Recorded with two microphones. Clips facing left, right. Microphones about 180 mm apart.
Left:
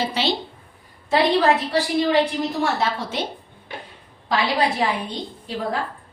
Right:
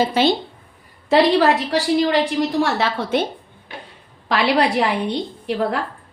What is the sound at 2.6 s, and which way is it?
Speech, 80° right.